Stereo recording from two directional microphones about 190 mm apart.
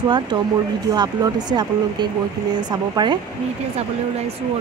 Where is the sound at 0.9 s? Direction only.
20° right (ahead or behind).